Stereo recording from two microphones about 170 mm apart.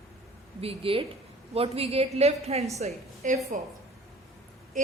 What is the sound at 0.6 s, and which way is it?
A woman's voice, 35° right (ahead or behind).